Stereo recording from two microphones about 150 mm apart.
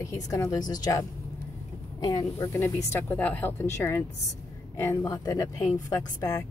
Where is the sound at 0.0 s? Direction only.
20° left (ahead or behind).